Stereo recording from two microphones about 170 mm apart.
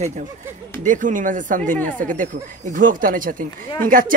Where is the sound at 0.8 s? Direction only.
50° right (ahead or behind).